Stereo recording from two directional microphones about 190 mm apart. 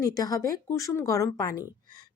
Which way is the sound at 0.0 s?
20° left (ahead or behind).